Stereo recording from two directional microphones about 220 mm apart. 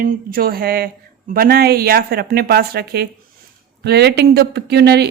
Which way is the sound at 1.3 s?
45° right (ahead or behind).